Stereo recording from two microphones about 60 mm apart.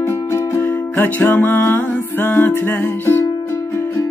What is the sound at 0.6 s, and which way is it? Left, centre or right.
Music, left.